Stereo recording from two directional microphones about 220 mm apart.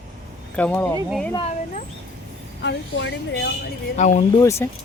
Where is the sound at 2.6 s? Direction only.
55° left (ahead or behind).